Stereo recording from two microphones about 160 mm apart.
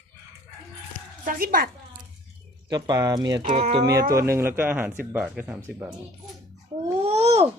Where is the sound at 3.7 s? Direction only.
25° right (ahead or behind).